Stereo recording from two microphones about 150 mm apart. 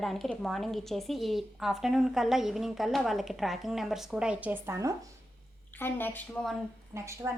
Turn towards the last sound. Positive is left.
turn(degrees=-20)  # may be behind; listen again after turning